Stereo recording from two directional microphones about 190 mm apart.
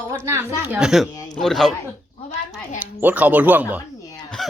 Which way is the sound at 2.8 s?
10° right (ahead or behind).